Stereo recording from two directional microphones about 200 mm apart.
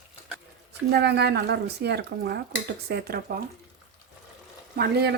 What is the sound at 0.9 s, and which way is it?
Speech, 55° right (ahead or behind).